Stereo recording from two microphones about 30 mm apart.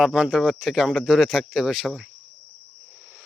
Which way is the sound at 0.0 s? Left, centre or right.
Centre.